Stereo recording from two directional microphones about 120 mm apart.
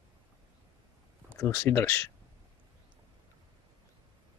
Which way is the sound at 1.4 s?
25° left (ahead or behind).